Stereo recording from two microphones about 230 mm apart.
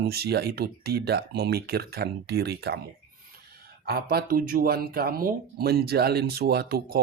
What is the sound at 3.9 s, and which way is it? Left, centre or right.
Speech, right.